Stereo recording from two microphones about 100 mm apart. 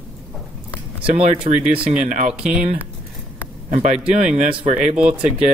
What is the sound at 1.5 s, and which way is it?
Speech, 90° right.